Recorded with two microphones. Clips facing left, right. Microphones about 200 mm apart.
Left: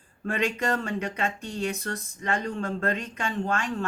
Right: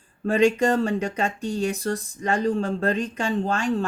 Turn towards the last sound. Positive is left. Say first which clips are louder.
# right 5 dB
turn(degrees=-30)  # may be behind; listen again after turning